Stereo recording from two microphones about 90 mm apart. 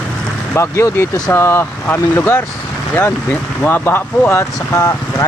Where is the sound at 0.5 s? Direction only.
30° left (ahead or behind).